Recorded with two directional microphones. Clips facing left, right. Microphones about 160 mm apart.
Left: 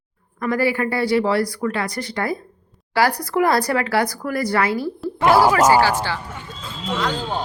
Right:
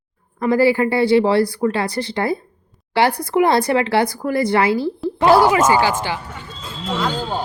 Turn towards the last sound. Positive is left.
turn(degrees=-5)  # may be behind; listen again after turning